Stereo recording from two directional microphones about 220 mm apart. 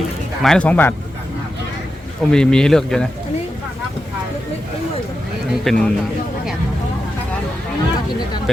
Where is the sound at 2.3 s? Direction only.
5° left (ahead or behind).